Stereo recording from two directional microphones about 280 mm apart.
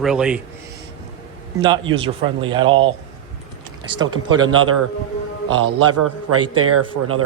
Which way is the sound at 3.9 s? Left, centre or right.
Centre.